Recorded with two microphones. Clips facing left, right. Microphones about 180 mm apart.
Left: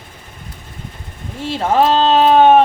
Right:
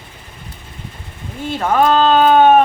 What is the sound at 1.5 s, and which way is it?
A woman's voice, 30° left (ahead or behind).